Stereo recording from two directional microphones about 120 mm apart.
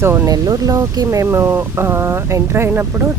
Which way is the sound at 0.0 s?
20° right (ahead or behind).